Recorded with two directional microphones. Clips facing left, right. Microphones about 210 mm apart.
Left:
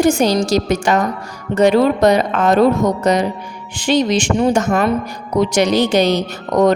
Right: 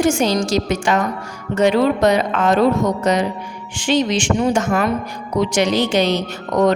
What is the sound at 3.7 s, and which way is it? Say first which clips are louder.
Speech: left 2 dB; 40° left (ahead or behind).